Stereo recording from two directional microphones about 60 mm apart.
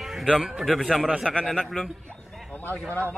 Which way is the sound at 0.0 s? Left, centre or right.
Centre.